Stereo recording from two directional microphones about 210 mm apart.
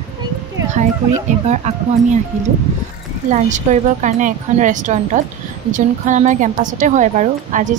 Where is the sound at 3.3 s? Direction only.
35° right (ahead or behind).